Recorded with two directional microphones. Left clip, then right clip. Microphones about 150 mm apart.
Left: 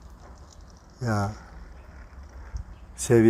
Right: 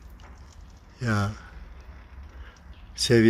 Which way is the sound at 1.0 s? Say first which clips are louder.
Even; 25° right (ahead or behind).